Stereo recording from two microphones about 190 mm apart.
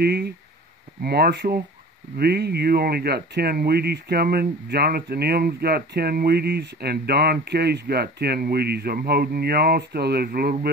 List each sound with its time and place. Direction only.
0.0 s speech: 55° right (ahead or behind)